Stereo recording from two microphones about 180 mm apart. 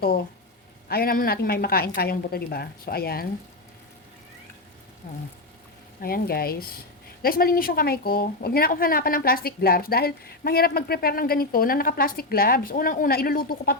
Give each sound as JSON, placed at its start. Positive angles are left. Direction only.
{"t": 0.9, "sound": "a woman's voice", "side_deg": 60}
{"t": 5.0, "sound": "a woman's voice", "side_deg": 50}